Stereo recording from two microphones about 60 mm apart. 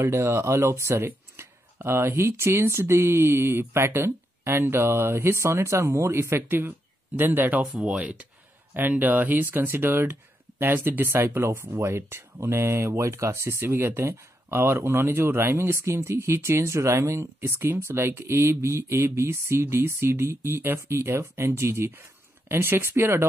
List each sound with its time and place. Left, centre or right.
0.0 s speech: right
1.0 s speech: right
7.2 s speech: right